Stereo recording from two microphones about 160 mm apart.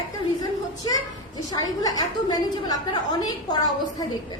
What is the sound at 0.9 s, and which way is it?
A woman's voice, 25° left (ahead or behind).